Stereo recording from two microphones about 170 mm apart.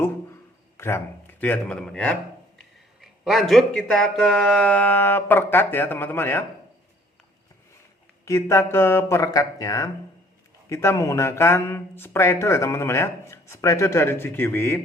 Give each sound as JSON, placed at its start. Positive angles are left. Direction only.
{"t": 0.8, "sound": "speech", "side_deg": 15}
{"t": 8.2, "sound": "speech", "side_deg": 15}